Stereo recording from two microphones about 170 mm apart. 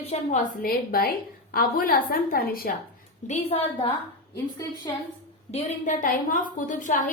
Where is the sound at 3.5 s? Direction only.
40° left (ahead or behind).